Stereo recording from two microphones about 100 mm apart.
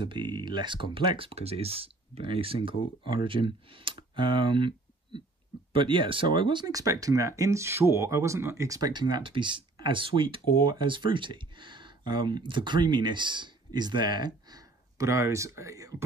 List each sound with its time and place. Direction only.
0.0 s speech: 50° right (ahead or behind)
6.7 s speech: 35° right (ahead or behind)